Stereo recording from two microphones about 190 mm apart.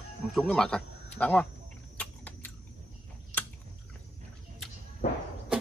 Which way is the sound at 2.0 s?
5° left (ahead or behind).